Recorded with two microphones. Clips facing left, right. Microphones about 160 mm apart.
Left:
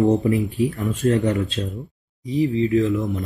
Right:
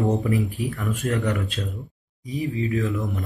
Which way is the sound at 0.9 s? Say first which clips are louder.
Left 5 dB; 25° left (ahead or behind).